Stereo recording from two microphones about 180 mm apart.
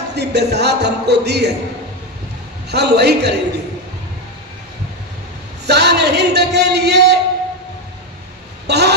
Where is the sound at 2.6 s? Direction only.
65° right (ahead or behind).